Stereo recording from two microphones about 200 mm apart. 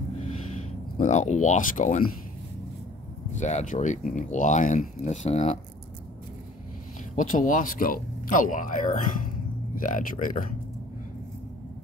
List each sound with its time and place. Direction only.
0.2 s a sound: 35° left (ahead or behind)
3.3 s speech: 35° left (ahead or behind)
7.2 s speech: 40° left (ahead or behind)